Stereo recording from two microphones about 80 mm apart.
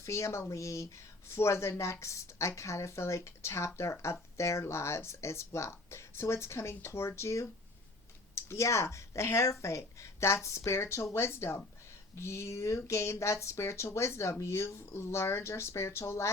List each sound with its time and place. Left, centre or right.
0.0 s speech: left